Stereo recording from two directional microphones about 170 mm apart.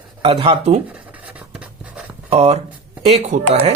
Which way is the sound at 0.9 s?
10° right (ahead or behind).